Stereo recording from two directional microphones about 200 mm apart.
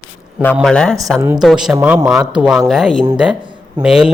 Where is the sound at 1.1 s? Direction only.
15° right (ahead or behind).